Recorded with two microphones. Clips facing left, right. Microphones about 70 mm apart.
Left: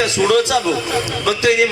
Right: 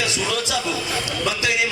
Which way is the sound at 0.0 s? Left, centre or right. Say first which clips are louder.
Left 9 dB; left.